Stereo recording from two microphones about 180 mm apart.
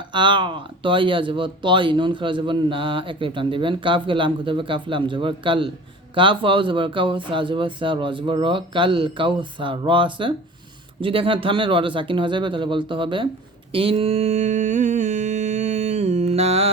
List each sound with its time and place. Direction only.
0.1 s speech: 25° right (ahead or behind)
13.7 s mantra: 30° right (ahead or behind)